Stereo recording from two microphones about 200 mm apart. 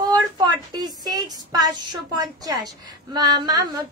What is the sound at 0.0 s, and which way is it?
A woman's voice, 20° right (ahead or behind).